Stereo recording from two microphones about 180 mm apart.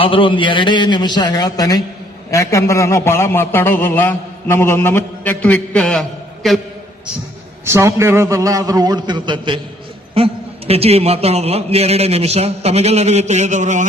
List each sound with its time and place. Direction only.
0.0 s a man's voice: 30° left (ahead or behind); by 6.6 s centre (ahead or behind)
7.6 s a man's voice: 15° right (ahead or behind); by 13.8 s 40° right (ahead or behind)